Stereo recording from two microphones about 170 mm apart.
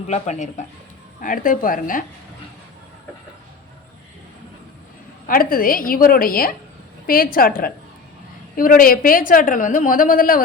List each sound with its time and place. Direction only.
0.1 s a woman's voice: 45° left (ahead or behind)
5.2 s a woman's voice: 55° left (ahead or behind)